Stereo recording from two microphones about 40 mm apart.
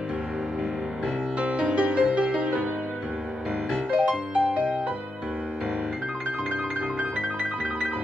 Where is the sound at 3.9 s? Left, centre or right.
Right.